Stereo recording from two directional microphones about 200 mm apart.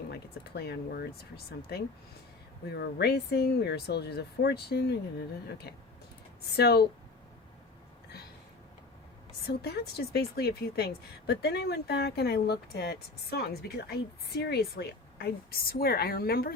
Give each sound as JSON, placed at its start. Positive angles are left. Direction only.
{"t": 0.1, "sound": "a woman's voice", "side_deg": 55}
{"t": 9.5, "sound": "a woman's voice", "side_deg": 55}